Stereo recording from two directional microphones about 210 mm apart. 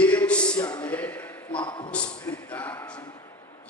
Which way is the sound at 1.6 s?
20° left (ahead or behind).